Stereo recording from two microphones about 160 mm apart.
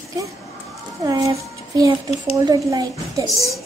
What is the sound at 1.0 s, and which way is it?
A woman's voice, 20° right (ahead or behind).